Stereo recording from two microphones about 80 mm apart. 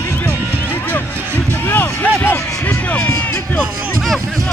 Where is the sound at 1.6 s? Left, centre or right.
Left.